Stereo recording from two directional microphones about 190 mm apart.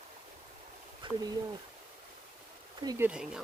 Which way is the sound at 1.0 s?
25° right (ahead or behind).